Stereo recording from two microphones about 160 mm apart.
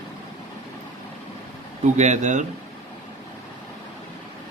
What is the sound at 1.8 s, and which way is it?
Speech, 50° right (ahead or behind).